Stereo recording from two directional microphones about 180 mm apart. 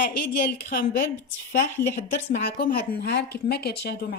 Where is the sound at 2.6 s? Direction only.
55° left (ahead or behind).